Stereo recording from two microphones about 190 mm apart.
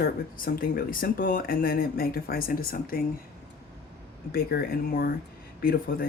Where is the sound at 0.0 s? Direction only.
50° left (ahead or behind).